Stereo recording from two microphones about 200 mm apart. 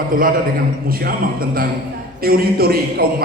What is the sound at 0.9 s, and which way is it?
A man's voice, 45° right (ahead or behind).